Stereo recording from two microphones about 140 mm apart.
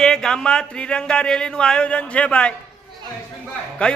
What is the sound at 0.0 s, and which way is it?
Speech, 5° left (ahead or behind).